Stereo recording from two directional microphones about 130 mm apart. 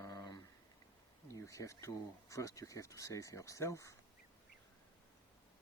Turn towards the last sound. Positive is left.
turn(degrees=25)  # may be behind; listen again after turning